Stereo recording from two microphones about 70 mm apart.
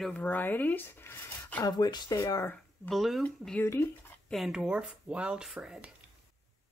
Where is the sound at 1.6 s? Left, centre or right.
Left.